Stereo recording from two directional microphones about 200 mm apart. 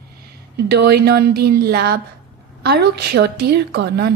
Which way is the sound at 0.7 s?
55° right (ahead or behind).